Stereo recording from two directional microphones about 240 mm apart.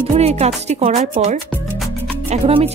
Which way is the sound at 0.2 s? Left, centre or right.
Right.